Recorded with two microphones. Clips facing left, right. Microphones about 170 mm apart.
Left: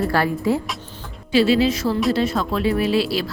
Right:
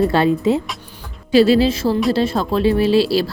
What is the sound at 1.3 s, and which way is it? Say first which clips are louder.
Speech: right 4 dB; 40° right (ahead or behind).